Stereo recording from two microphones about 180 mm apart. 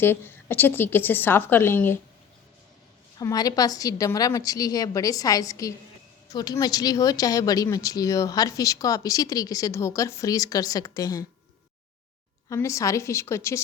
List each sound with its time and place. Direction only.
0.0 s a woman's voice: 10° left (ahead or behind)
3.2 s speech: 20° left (ahead or behind)
12.5 s a woman's voice: 15° left (ahead or behind)